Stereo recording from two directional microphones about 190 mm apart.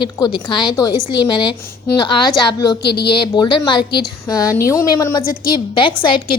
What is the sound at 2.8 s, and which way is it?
Speech, 60° left (ahead or behind).